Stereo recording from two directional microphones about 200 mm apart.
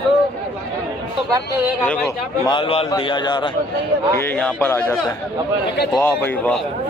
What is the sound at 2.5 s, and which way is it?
Speech, 25° left (ahead or behind).